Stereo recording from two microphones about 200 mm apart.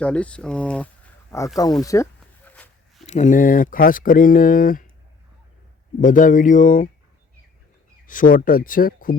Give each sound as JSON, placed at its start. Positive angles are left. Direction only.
{"t": 0.0, "sound": "speech", "side_deg": 5}
{"t": 2.6, "sound": "a sound", "side_deg": 5}
{"t": 3.1, "sound": "speech", "side_deg": 35}
{"t": 6.0, "sound": "speech", "side_deg": 40}
{"t": 8.0, "sound": "speech", "side_deg": 40}